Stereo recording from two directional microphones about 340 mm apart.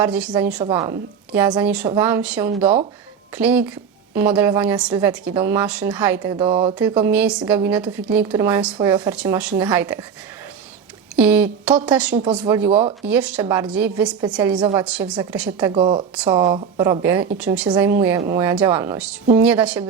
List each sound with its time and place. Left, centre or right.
0.0 s a woman's voice: centre
6.7 s a woman's voice: centre
11.2 s a woman's voice: centre
15.7 s speech: centre
16.1 s a woman's voice: centre